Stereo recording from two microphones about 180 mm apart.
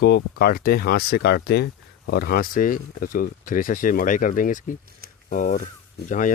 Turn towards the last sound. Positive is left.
turn(degrees=45)  # may be behind; listen again after turning